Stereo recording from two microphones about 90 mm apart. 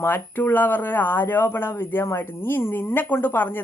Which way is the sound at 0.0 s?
20° left (ahead or behind).